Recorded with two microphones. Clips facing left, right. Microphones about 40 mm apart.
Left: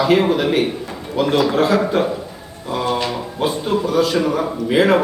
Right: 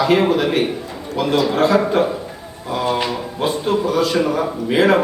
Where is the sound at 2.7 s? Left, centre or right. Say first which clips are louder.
Even; centre.